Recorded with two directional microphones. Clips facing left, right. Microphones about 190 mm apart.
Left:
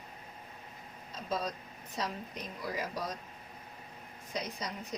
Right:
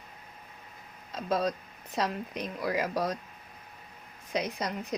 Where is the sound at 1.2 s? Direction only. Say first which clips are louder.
Right 7 dB; 75° right (ahead or behind).